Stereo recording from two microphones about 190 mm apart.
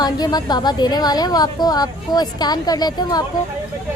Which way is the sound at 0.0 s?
20° left (ahead or behind).